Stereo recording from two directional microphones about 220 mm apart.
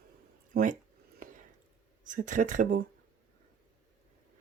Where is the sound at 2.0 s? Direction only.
35° right (ahead or behind).